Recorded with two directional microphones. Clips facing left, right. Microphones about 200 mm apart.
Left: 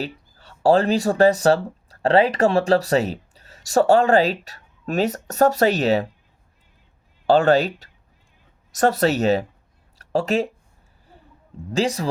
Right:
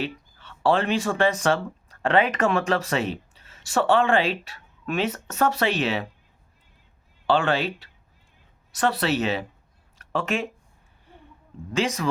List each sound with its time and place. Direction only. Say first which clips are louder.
0.0 s speech: left 1 dB; 40° left (ahead or behind)
7.3 s speech: left 6 dB; 40° left (ahead or behind)
11.7 s speech: left 3 dB; 35° left (ahead or behind)